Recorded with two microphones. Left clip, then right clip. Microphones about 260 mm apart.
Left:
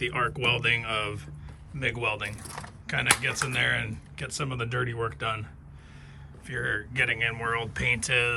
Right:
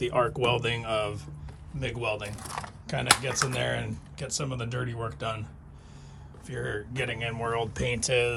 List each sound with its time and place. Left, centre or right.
0.0 s speech: centre
2.3 s speech: centre
2.8 s speech: centre
6.5 s speech: centre